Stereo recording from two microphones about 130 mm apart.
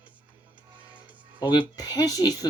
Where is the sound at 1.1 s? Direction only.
40° right (ahead or behind).